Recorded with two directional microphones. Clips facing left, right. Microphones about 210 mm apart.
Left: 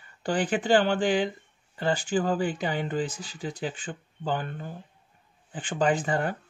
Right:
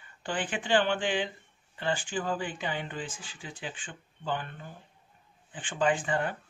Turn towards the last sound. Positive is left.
turn(degrees=40)  # may be behind; listen again after turning